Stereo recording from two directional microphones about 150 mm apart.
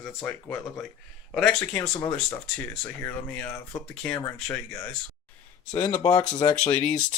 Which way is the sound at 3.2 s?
15° left (ahead or behind).